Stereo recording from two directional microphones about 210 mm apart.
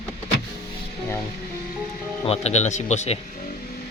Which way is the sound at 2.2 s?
30° left (ahead or behind).